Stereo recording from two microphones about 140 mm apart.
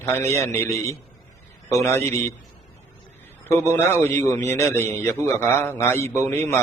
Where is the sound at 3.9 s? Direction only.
20° left (ahead or behind).